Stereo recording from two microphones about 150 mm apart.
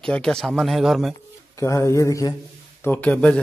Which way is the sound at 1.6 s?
20° left (ahead or behind).